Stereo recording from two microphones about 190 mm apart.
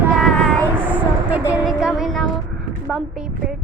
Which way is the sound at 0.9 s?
10° right (ahead or behind).